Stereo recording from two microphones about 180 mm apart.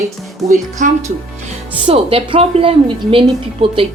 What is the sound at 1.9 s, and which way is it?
Speech, 30° right (ahead or behind).